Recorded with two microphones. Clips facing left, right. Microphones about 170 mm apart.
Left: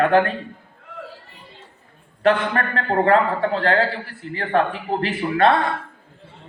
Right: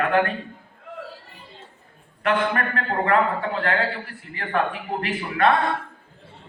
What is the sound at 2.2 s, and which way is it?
A man's voice, 35° left (ahead or behind).